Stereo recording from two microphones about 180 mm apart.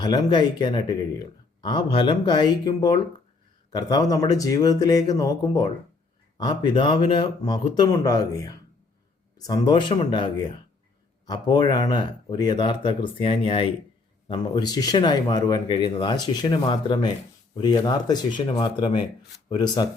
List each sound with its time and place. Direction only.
0.0 s speech: 20° left (ahead or behind)